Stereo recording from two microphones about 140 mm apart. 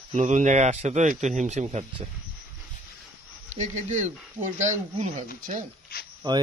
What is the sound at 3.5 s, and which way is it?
A man's voice, 60° right (ahead or behind).